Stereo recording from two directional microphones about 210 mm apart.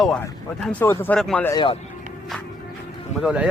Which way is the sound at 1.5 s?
25° left (ahead or behind).